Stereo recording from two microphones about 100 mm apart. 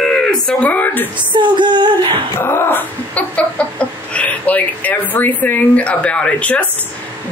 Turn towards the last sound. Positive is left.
turn(degrees=15)  # may be behind; listen again after turning